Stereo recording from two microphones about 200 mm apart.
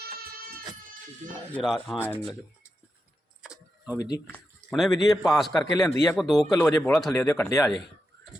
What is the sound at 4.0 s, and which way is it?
Speech, 20° left (ahead or behind).